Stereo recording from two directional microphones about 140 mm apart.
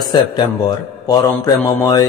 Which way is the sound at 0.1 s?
30° left (ahead or behind).